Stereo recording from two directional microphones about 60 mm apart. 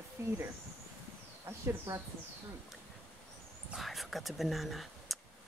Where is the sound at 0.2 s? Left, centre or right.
Right.